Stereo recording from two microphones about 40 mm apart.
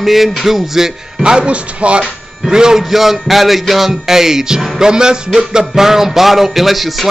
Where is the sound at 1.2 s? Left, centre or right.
Right.